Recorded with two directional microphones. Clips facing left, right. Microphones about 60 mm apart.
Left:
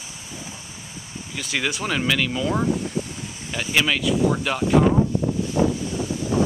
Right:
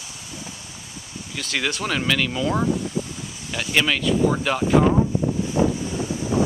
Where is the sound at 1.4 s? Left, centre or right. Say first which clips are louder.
Even; centre.